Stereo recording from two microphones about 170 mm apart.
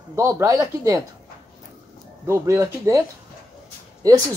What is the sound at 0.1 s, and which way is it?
Speech, 15° right (ahead or behind).